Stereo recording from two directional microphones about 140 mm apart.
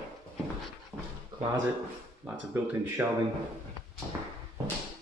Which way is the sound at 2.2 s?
15° right (ahead or behind).